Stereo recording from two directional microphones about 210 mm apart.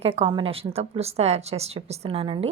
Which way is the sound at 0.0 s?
25° right (ahead or behind).